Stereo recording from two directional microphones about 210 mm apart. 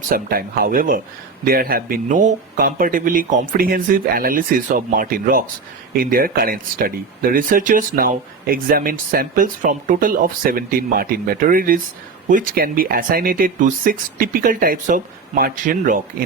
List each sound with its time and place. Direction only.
0.1 s speech: 45° right (ahead or behind)